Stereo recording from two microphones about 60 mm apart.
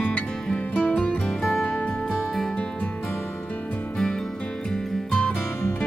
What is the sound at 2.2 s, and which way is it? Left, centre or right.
Music, centre.